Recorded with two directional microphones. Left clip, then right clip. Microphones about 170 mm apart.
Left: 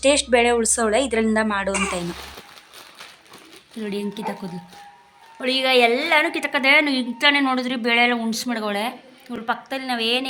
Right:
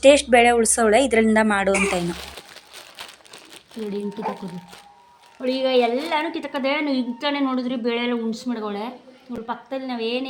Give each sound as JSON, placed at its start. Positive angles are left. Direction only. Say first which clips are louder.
{"t": 0.0, "sound": "a woman's voice", "louder": "right 4 dB", "side_deg": -10}
{"t": 3.8, "sound": "speech", "louder": "left 1 dB", "side_deg": 5}
{"t": 5.4, "sound": "a woman's voice", "louder": "left 2 dB", "side_deg": 5}